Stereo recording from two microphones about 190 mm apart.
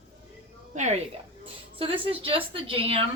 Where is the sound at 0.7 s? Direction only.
40° right (ahead or behind).